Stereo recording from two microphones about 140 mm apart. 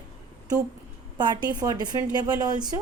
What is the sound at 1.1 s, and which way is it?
Speech, 30° right (ahead or behind).